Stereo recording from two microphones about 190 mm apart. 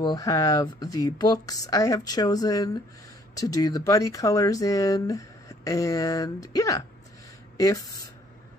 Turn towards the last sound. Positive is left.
turn(degrees=20)  # may be behind; listen again after turning